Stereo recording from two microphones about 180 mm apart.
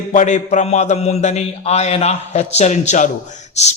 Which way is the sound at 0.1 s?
40° left (ahead or behind).